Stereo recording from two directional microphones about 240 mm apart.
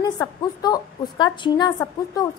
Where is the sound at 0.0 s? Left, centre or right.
Centre.